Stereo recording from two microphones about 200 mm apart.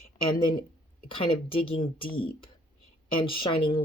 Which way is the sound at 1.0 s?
25° left (ahead or behind).